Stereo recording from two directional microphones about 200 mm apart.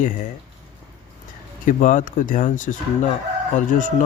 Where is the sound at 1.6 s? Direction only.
40° left (ahead or behind).